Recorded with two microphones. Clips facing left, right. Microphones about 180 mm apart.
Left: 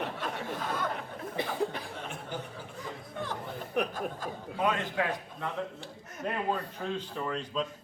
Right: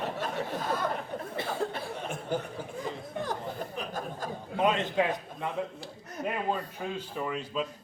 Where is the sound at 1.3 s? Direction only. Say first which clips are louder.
Left 1 dB; 15° left (ahead or behind).